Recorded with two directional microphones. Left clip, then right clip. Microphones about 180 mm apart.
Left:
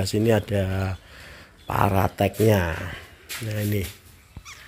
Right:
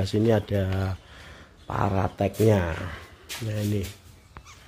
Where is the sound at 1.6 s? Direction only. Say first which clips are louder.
Left 5 dB; 10° left (ahead or behind).